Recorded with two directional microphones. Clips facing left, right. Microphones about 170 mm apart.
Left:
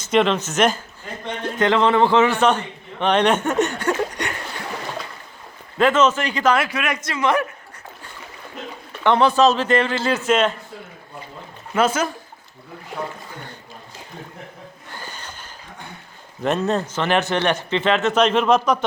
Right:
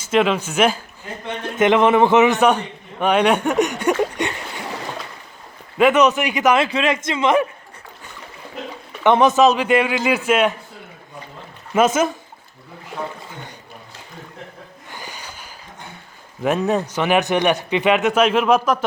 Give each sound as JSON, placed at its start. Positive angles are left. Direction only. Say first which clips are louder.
{"t": 0.0, "sound": "a man's voice", "louder": "even", "side_deg": -5}
{"t": 1.5, "sound": "a man's voice", "louder": "right 3 dB", "side_deg": -20}
{"t": 3.8, "sound": "a sound", "louder": "right 3 dB", "side_deg": -20}
{"t": 5.7, "sound": "a man's voice", "louder": "right 2 dB", "side_deg": -15}
{"t": 9.0, "sound": "a man's voice", "louder": "right 2 dB", "side_deg": -20}
{"t": 11.7, "sound": "a man's voice", "louder": "right 3 dB", "side_deg": -20}
{"t": 14.9, "sound": "a sound", "louder": "right 1 dB", "side_deg": -10}
{"t": 16.4, "sound": "a man's voice", "louder": "right 2 dB", "side_deg": -5}